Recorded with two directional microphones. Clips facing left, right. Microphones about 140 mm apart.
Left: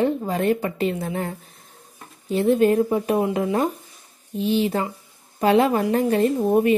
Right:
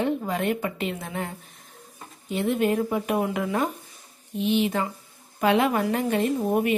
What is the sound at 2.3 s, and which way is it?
A woman's voice, 35° left (ahead or behind).